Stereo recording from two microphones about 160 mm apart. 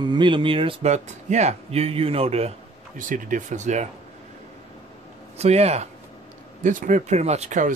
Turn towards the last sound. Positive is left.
turn(degrees=-45)  # may be behind; listen again after turning